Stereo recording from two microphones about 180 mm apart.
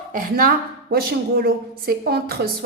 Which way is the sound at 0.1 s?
55° right (ahead or behind).